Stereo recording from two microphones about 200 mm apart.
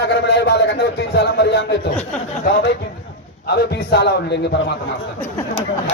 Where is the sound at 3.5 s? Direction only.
55° left (ahead or behind).